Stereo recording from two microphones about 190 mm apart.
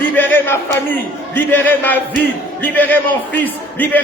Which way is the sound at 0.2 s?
10° left (ahead or behind).